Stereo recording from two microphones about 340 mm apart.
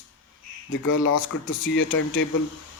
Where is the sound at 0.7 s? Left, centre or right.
Left.